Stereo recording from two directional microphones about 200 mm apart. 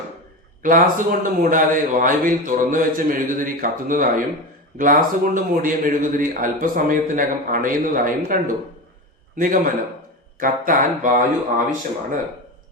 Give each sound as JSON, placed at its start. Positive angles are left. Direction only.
{"t": 0.6, "sound": "a man's voice", "side_deg": -40}